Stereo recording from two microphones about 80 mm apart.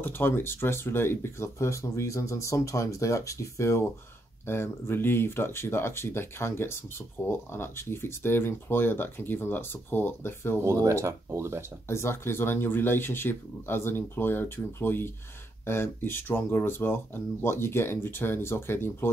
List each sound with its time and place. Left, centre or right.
0.0 s speech: left
10.6 s speech: right
11.9 s speech: left